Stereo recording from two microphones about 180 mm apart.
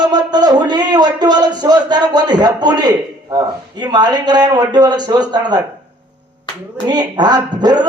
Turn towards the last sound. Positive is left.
turn(degrees=-25)  # may be behind; listen again after turning